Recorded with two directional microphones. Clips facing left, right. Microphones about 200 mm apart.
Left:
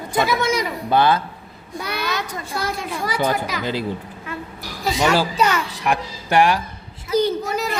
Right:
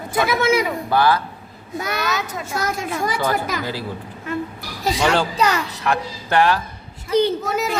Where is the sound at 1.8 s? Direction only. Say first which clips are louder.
Right 2 dB; 50° right (ahead or behind).